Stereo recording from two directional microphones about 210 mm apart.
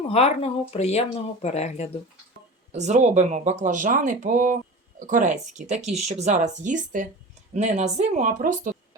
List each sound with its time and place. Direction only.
0.1 s speech: 30° left (ahead or behind)
2.7 s speech: 35° right (ahead or behind)